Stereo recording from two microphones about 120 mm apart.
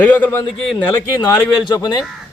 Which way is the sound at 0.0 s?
10° left (ahead or behind).